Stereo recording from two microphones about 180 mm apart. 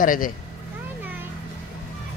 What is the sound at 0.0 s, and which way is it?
Speech, 50° left (ahead or behind).